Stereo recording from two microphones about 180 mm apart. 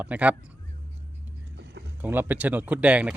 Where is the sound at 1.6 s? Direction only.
70° right (ahead or behind).